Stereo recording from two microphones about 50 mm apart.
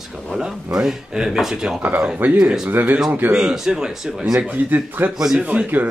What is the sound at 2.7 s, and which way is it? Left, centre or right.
Speech, right.